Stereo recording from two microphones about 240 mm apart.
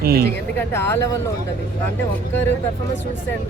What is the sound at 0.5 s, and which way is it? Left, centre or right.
Speech, centre.